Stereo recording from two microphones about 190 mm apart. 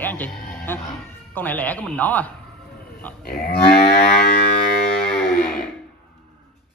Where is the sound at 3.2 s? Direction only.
55° left (ahead or behind).